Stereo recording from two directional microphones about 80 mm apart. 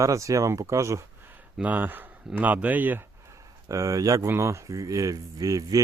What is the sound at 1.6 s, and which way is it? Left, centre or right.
Speech, right.